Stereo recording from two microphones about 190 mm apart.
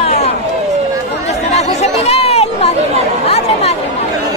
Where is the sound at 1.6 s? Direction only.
35° left (ahead or behind).